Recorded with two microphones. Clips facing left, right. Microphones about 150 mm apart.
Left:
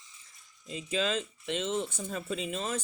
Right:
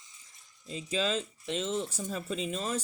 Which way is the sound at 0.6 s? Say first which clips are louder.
Even; 35° right (ahead or behind).